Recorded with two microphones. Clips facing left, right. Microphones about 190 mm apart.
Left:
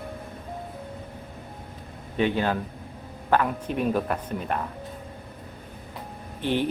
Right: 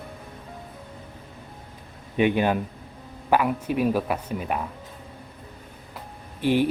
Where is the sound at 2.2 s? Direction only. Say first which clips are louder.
Right 3 dB; 15° right (ahead or behind).